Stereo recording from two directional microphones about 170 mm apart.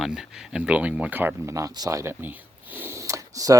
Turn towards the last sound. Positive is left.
turn(degrees=-20)  # may be behind; listen again after turning